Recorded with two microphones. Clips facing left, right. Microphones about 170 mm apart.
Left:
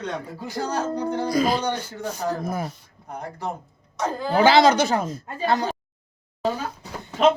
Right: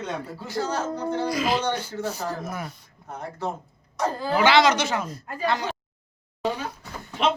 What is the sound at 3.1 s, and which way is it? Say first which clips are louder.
Speech: even; 15° left (ahead or behind).